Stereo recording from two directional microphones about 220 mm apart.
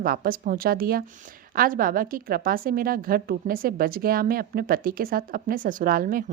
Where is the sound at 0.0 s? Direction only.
40° right (ahead or behind).